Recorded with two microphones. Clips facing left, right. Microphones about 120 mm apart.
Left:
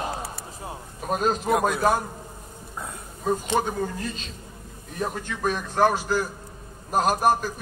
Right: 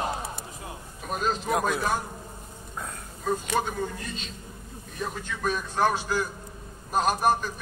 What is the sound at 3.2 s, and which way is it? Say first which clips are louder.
Speech: left 3 dB; 25° left (ahead or behind).